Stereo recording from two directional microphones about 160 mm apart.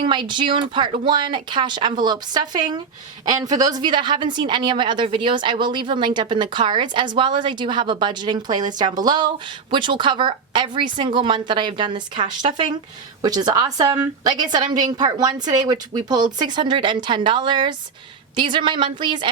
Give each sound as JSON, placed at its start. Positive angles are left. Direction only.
{"t": 0.0, "sound": "a woman's voice", "side_deg": -30}